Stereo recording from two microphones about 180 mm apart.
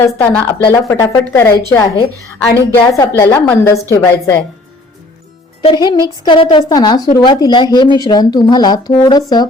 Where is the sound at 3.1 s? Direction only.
15° left (ahead or behind).